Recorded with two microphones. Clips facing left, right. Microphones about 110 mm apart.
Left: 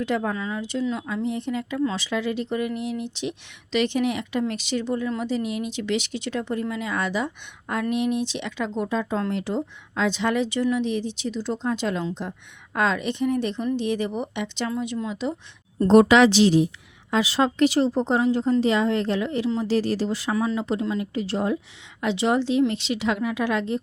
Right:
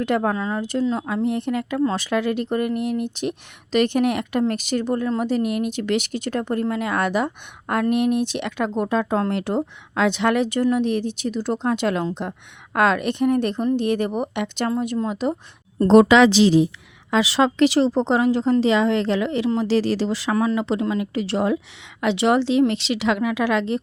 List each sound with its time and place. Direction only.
0.0 s speech: 55° right (ahead or behind)
1.0 s a woman's voice: 55° right (ahead or behind)
1.8 s a woman's voice: 45° right (ahead or behind)
14.7 s speech: 45° right (ahead or behind)
17.1 s a woman's voice: 90° right
20.3 s speech: 55° right (ahead or behind)
20.6 s speech: 85° right
22.0 s a woman's voice: 75° right (ahead or behind)